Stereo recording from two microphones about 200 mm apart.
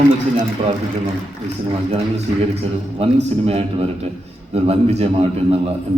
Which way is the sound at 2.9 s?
30° right (ahead or behind).